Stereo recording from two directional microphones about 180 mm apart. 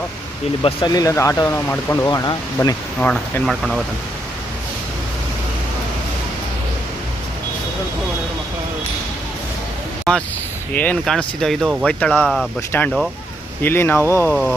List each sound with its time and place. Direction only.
0.6 s speech: 25° left (ahead or behind); by 3.8 s centre (ahead or behind)
10.1 s speech: centre (ahead or behind)
12.7 s speech: 10° left (ahead or behind)